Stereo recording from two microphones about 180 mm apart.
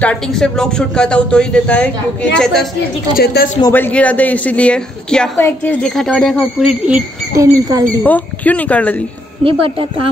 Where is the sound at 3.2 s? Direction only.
60° left (ahead or behind).